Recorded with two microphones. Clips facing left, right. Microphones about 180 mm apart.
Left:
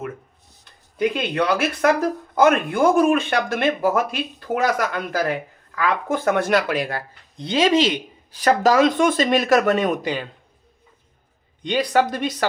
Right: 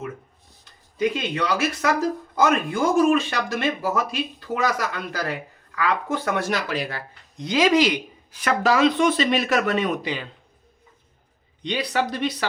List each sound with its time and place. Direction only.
0.9 s speech: 60° left (ahead or behind)
7.3 s speech: 30° left (ahead or behind)
8.4 s speech: 40° left (ahead or behind)
11.6 s speech: 50° left (ahead or behind)